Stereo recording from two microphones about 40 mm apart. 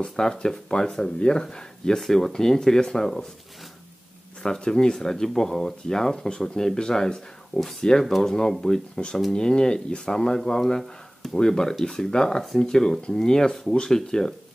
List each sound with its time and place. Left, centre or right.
0.0 s speech: centre
4.4 s speech: centre